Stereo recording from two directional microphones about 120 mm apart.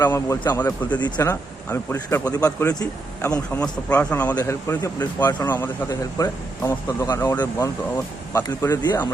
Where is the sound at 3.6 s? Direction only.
10° left (ahead or behind).